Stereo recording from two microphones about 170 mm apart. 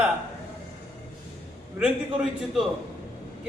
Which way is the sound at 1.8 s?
5° right (ahead or behind).